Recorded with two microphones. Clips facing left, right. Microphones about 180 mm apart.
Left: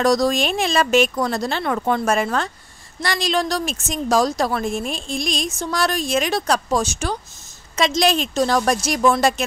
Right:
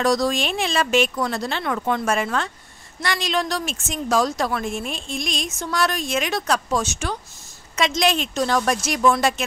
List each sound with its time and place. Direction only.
0.0 s a woman's voice: 40° left (ahead or behind)